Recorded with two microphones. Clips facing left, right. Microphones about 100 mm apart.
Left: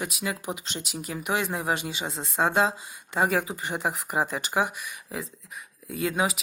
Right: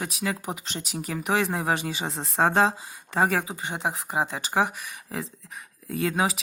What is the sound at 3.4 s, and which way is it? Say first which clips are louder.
Speech: even; 20° right (ahead or behind).